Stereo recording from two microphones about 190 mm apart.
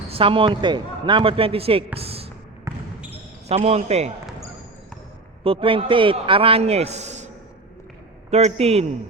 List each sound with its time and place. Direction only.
0.1 s a man's voice: 30° right (ahead or behind)
2.0 s a sound: 30° right (ahead or behind)
2.6 s trickle: 10° right (ahead or behind)
3.5 s a man's voice: 35° right (ahead or behind)
5.4 s a man's voice: 30° right (ahead or behind)
8.3 s a man's voice: 35° right (ahead or behind)